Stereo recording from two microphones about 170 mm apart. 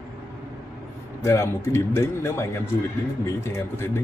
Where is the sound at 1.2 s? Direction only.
15° left (ahead or behind).